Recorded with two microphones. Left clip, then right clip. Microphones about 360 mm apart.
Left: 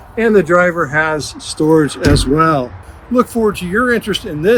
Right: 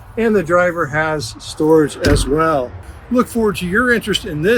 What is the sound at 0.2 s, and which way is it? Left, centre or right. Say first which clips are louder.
Speech: left 3 dB; left.